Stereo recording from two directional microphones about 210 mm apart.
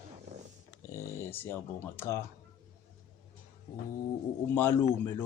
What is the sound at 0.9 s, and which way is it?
Speech, 15° left (ahead or behind).